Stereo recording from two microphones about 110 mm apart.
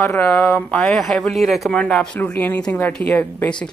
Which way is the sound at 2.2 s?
15° left (ahead or behind).